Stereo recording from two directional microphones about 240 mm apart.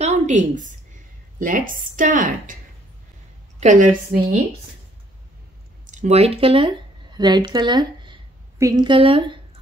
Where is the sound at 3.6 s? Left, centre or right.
Right.